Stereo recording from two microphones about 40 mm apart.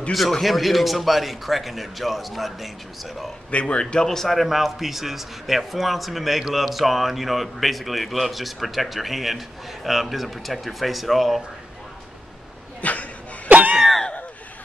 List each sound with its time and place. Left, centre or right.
0.1 s a man's voice: centre
3.5 s speech: left
3.8 s a man's voice: centre
12.8 s a sound: left
13.5 s cough: right